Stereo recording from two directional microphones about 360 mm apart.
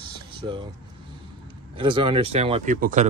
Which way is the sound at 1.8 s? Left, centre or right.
Centre.